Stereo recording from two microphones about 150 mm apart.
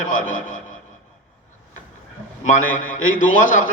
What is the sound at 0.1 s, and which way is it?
Speech, 60° left (ahead or behind).